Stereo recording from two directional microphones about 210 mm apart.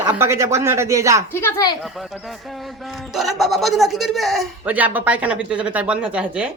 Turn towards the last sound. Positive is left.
turn(degrees=-5)  # may be behind; listen again after turning